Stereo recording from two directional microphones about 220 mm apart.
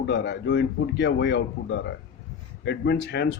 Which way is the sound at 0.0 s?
50° left (ahead or behind).